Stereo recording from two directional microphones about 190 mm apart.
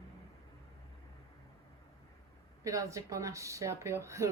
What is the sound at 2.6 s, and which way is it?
Speech, 15° right (ahead or behind).